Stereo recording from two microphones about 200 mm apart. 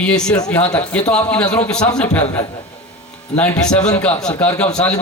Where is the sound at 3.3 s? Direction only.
5° left (ahead or behind).